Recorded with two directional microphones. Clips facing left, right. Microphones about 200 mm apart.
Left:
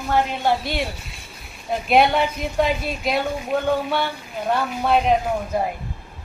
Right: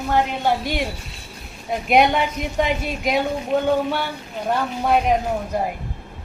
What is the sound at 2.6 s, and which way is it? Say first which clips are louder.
Speech: left 1 dB; 15° right (ahead or behind).